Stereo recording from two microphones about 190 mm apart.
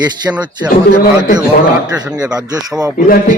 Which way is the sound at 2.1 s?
5° right (ahead or behind).